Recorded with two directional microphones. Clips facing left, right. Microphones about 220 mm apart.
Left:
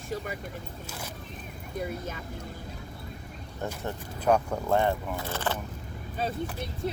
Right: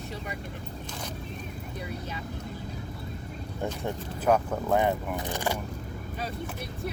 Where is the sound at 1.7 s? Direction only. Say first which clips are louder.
Left 5 dB; 50° left (ahead or behind).